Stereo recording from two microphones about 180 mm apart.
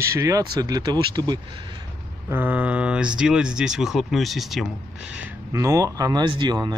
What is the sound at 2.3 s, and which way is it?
Speech, 10° right (ahead or behind).